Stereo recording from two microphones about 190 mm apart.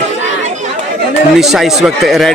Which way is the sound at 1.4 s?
Centre (ahead or behind).